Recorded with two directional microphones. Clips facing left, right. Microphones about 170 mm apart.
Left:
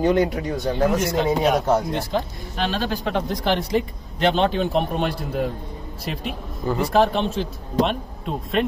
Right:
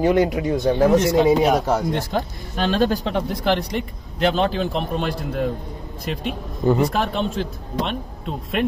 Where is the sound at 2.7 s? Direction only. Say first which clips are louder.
Right 7 dB; 45° right (ahead or behind).